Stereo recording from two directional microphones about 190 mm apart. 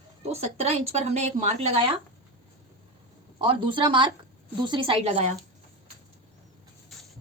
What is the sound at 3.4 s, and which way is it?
Speech, 25° right (ahead or behind).